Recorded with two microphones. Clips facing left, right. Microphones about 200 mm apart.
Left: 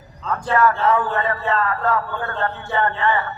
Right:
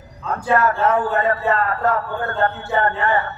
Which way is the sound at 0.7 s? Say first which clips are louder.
Even; 45° right (ahead or behind).